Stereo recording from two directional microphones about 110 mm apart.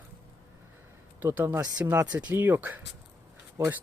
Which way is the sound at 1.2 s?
20° right (ahead or behind).